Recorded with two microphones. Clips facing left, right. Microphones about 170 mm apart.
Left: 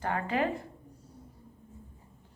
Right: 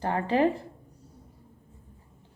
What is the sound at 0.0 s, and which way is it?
Speech, 30° right (ahead or behind).